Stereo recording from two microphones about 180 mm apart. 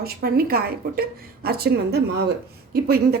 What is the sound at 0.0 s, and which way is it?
A woman's voice, 60° right (ahead or behind).